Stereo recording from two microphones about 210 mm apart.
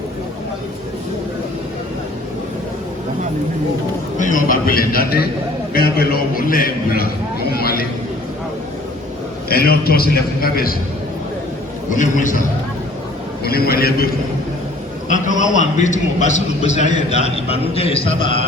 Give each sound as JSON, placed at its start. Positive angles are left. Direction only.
{"t": 4.2, "sound": "a man's voice", "side_deg": 40}
{"t": 9.5, "sound": "a man's voice", "side_deg": 45}
{"t": 11.9, "sound": "a man's voice", "side_deg": 35}
{"t": 13.4, "sound": "a man's voice", "side_deg": 45}
{"t": 15.1, "sound": "a man's voice", "side_deg": 35}